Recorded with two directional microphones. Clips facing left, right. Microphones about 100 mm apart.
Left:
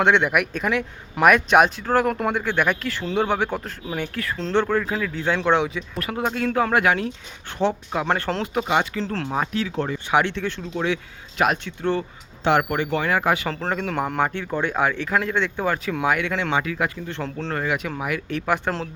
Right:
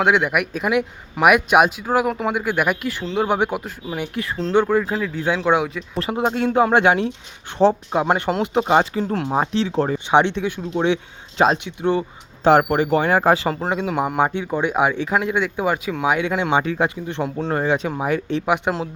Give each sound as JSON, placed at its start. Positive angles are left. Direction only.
{"t": 0.0, "sound": "speech", "side_deg": -5}
{"t": 4.4, "sound": "speech", "side_deg": -5}
{"t": 6.0, "sound": "speech", "side_deg": -25}
{"t": 8.0, "sound": "speech", "side_deg": -15}
{"t": 8.6, "sound": "speech", "side_deg": -30}
{"t": 9.0, "sound": "speech", "side_deg": -15}
{"t": 9.3, "sound": "speech", "side_deg": -30}
{"t": 12.5, "sound": "speech", "side_deg": -35}
{"t": 13.5, "sound": "speech", "side_deg": -10}